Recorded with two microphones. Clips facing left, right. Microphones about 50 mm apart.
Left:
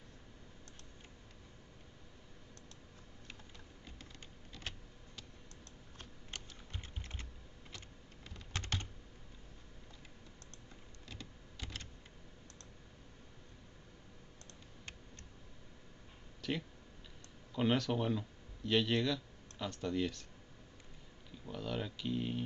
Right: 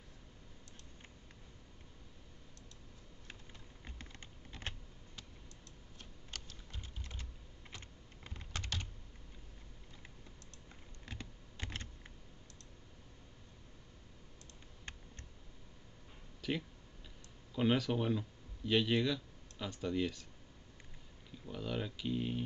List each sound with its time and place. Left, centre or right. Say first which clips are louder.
6.3 s typing: left 1 dB; left
7.7 s computer keyboard: right 1 dB; right
8.5 s computer keyboard: left 2 dB; left
11.1 s computer keyboard: right 2 dB; right
16.3 s a sound: right 1 dB; centre
17.6 s speech: even; centre
21.5 s speech: even; centre